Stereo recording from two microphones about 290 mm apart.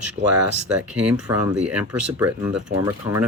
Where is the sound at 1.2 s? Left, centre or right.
Centre.